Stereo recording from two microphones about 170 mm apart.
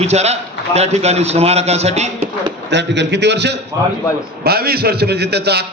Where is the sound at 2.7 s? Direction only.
90° right.